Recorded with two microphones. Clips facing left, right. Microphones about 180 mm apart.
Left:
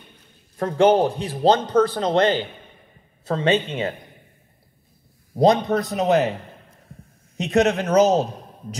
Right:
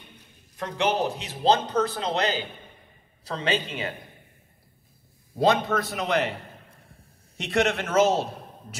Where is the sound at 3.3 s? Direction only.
35° left (ahead or behind).